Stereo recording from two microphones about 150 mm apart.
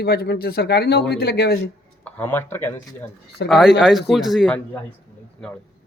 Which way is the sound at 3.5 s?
Centre (ahead or behind).